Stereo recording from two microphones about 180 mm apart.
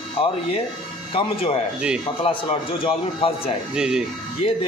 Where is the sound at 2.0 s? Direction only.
30° left (ahead or behind).